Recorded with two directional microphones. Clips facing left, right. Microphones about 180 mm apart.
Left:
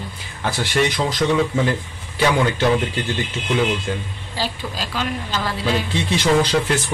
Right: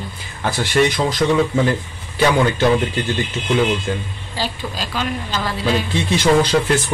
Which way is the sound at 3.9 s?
45° right (ahead or behind).